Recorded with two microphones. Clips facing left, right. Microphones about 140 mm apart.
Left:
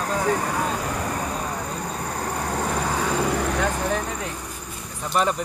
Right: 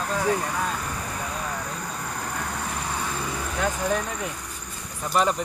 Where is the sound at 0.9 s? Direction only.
65° left (ahead or behind).